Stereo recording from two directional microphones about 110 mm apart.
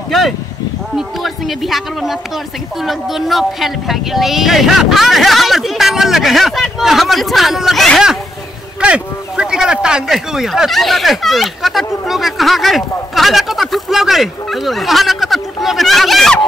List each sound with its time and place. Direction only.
0.9 s speech: centre (ahead or behind)